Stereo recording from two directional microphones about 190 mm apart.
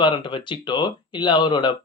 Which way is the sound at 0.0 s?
25° left (ahead or behind).